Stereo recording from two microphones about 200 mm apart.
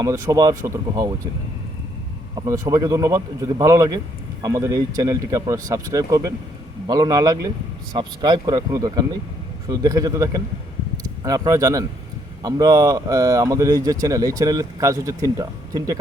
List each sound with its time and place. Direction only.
0.0 s speech: 15° right (ahead or behind)
2.3 s speech: 15° right (ahead or behind)